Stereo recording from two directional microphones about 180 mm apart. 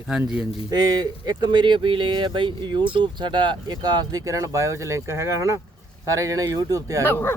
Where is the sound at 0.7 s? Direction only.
25° right (ahead or behind).